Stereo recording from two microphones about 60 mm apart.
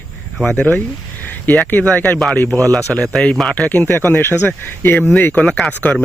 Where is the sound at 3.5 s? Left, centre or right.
Left.